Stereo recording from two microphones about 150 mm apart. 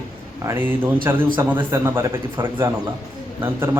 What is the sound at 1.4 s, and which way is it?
A man's voice, 15° right (ahead or behind).